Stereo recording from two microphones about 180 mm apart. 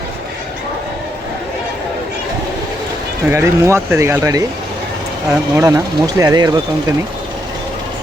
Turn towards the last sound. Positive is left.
turn(degrees=-20)  # may be behind; listen again after turning